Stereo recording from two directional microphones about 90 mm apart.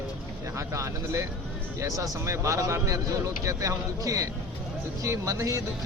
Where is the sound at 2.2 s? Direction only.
35° right (ahead or behind).